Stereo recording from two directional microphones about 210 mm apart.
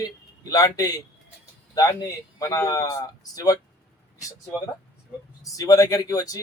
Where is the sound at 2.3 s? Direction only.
15° left (ahead or behind).